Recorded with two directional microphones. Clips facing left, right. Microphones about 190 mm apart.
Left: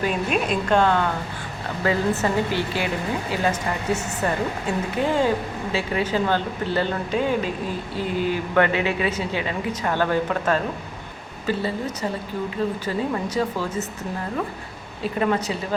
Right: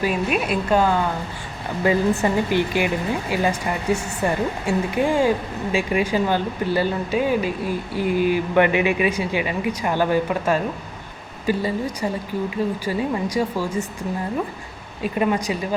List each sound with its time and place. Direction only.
0.0 s speech: 5° right (ahead or behind)
3.8 s speech: 10° right (ahead or behind)
15.0 s speech: 15° right (ahead or behind)